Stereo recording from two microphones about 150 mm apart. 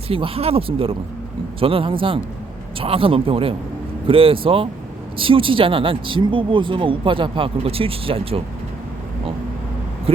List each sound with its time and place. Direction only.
0.1 s speech: 40° right (ahead or behind)